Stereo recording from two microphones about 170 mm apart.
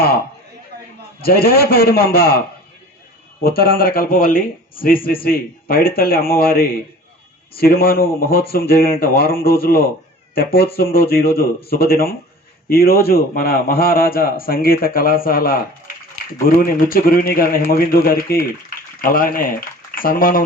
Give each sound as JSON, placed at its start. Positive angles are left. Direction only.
{"t": 1.2, "sound": "a man's voice", "side_deg": 60}
{"t": 3.4, "sound": "a man's voice", "side_deg": 60}